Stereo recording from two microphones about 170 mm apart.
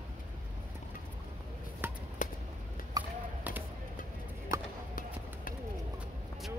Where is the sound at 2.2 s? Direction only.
50° left (ahead or behind).